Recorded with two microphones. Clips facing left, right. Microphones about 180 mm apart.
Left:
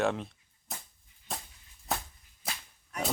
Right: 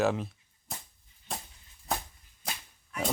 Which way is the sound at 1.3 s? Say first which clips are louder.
Right 1 dB; centre (ahead or behind).